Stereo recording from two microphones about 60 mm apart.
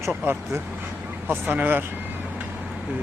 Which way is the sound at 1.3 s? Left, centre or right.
Right.